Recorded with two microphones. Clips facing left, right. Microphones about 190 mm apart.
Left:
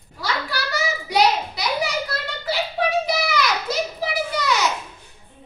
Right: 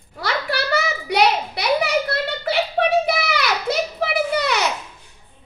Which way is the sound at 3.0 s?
65° right (ahead or behind).